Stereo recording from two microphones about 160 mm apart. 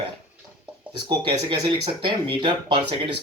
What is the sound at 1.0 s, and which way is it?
Speech, 30° right (ahead or behind).